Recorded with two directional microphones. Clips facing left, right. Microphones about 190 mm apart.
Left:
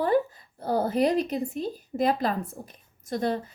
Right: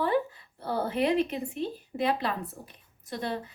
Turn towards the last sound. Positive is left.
turn(degrees=45)  # may be behind; listen again after turning